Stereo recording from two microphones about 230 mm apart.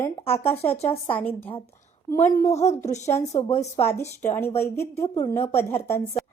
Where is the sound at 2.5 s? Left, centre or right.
Left.